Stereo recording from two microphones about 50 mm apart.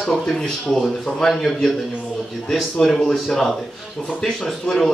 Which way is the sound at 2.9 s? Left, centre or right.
Centre.